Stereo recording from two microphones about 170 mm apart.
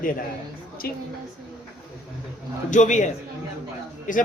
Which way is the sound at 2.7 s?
45° left (ahead or behind).